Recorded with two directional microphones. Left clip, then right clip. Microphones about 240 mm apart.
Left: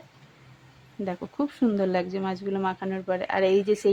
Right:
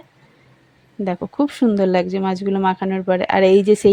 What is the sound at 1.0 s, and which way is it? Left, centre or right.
A woman's voice, right.